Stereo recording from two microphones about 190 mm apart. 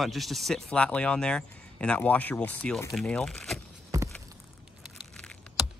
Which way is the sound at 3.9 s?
15° right (ahead or behind).